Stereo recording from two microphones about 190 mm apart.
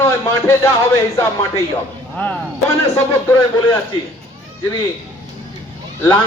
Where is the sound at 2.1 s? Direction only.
5° left (ahead or behind).